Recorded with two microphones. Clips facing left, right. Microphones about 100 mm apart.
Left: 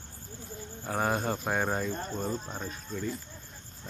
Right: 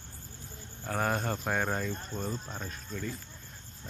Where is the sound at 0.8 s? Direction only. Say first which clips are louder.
Left 2 dB; 10° left (ahead or behind).